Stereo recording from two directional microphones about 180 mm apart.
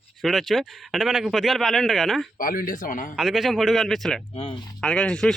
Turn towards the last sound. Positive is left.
turn(degrees=5)  # may be behind; listen again after turning